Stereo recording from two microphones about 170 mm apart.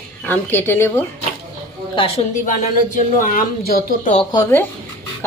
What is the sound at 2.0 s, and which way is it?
A woman's voice, 35° left (ahead or behind).